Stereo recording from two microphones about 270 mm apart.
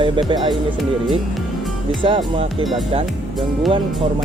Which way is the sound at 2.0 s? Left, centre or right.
Centre.